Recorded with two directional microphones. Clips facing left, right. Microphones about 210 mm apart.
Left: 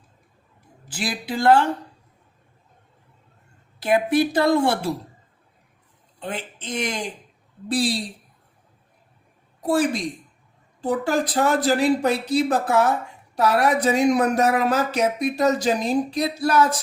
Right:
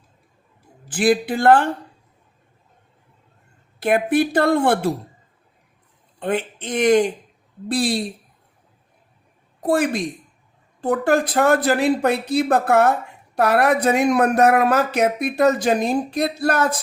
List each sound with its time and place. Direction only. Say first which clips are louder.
0.9 s speech: right 10 dB; 50° right (ahead or behind)
3.8 s speech: right 1 dB; 55° right (ahead or behind)
6.1 s speech: right 9 dB; 55° right (ahead or behind)
10.8 s speech: right 4 dB; 55° right (ahead or behind)